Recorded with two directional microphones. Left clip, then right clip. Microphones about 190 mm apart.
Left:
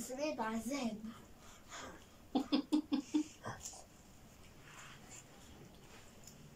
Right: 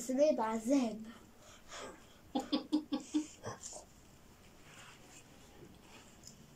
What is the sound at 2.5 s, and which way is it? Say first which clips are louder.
Laughter: even; 10° left (ahead or behind).